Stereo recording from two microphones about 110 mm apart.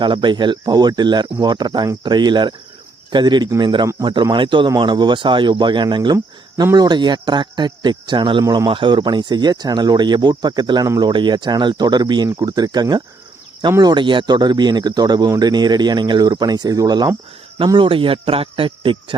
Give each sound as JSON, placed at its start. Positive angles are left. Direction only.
{"t": 0.0, "sound": "speech", "side_deg": -45}
{"t": 17.7, "sound": "speech", "side_deg": -50}